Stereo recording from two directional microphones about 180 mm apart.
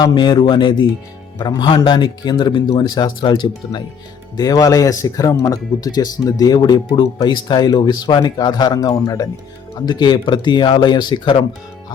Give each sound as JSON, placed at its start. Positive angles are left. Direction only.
{"t": 0.0, "sound": "speech", "side_deg": 25}